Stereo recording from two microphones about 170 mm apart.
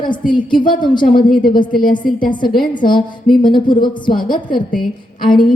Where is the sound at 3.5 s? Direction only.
25° left (ahead or behind).